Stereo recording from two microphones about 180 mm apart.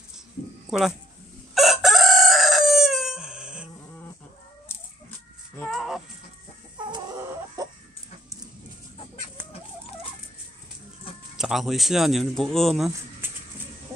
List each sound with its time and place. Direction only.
0.7 s speech: centre (ahead or behind)
1.5 s chicken: centre (ahead or behind)
5.7 s music: centre (ahead or behind)
6.8 s chicken: 25° right (ahead or behind)
7.2 s chicken: 15° right (ahead or behind)
11.3 s speech: centre (ahead or behind)